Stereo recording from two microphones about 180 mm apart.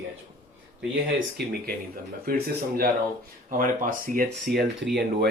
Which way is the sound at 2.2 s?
55° right (ahead or behind).